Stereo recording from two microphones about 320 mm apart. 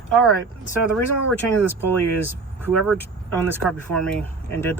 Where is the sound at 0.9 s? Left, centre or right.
Centre.